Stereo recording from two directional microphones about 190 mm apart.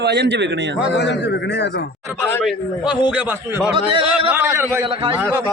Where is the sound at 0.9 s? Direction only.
65° left (ahead or behind).